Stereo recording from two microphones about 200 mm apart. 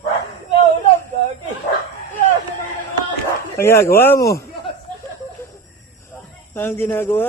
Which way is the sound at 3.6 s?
10° left (ahead or behind).